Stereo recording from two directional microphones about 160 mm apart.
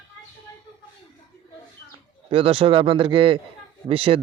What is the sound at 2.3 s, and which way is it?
Speech, 35° right (ahead or behind).